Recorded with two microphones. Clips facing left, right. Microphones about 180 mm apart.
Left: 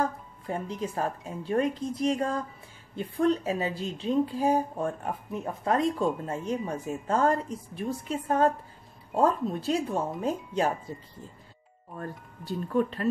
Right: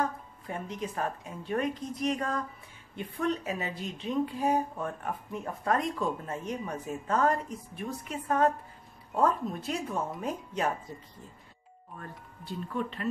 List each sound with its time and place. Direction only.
0.0 s a woman's voice: 30° left (ahead or behind)
12.0 s a woman's voice: 40° left (ahead or behind)